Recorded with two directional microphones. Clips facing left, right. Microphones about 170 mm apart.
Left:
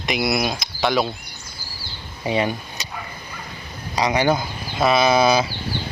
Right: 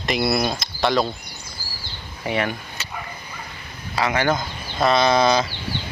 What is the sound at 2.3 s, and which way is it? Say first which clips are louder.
Speech: left 2 dB; 15° left (ahead or behind).